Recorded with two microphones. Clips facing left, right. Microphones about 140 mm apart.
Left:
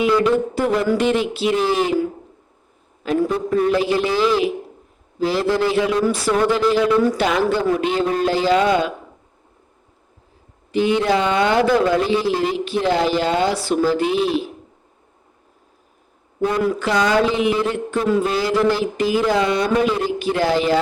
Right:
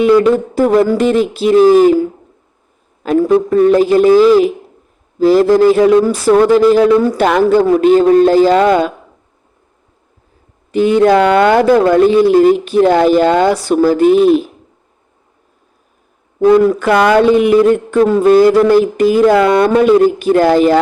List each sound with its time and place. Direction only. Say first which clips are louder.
0.0 s speech: right 7 dB; 45° right (ahead or behind)
3.0 s speech: right 9 dB; 50° right (ahead or behind)
10.7 s speech: right 8 dB; 45° right (ahead or behind)
16.6 s speech: right 8 dB; 55° right (ahead or behind)